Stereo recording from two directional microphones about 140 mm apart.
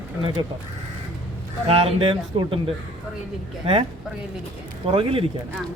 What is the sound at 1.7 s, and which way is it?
A man's voice, 40° right (ahead or behind).